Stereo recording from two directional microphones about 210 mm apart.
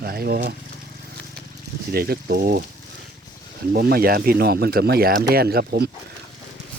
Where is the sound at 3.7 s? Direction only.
45° right (ahead or behind).